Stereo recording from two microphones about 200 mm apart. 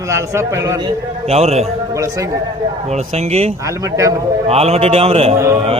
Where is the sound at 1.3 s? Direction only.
30° right (ahead or behind).